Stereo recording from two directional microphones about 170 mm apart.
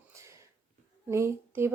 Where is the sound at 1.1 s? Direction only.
15° right (ahead or behind).